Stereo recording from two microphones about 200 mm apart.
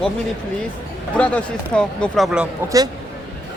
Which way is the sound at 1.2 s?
5° left (ahead or behind).